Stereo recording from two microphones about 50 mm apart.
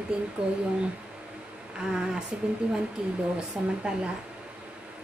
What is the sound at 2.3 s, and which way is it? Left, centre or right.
A woman's voice, centre.